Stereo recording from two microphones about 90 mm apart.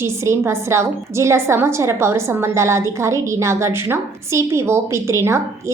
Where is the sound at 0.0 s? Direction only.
30° right (ahead or behind).